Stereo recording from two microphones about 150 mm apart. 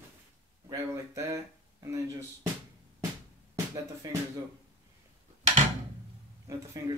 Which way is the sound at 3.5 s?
20° right (ahead or behind).